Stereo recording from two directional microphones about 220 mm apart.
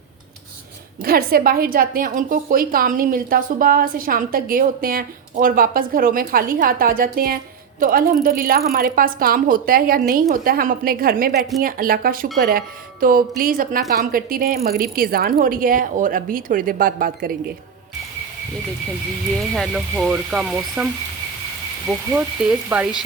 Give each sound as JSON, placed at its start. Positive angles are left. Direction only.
{"t": 1.0, "sound": "a woman's voice", "side_deg": -40}
{"t": 19.5, "sound": "speech", "side_deg": 0}
{"t": 21.8, "sound": "speech", "side_deg": -5}